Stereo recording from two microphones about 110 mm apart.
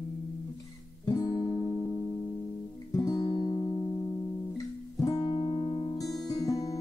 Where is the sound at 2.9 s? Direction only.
30° left (ahead or behind).